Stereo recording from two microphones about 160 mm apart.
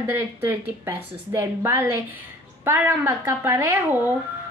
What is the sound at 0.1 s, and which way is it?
A woman's voice, 15° right (ahead or behind).